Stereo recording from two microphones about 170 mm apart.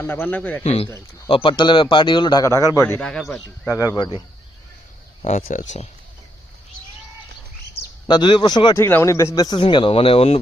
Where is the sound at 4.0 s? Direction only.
30° left (ahead or behind).